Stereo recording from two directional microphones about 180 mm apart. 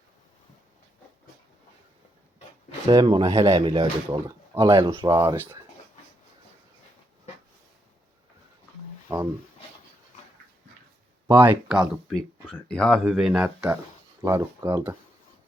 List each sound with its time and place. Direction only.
2.8 s speech: 25° right (ahead or behind)
11.3 s speech: 10° right (ahead or behind)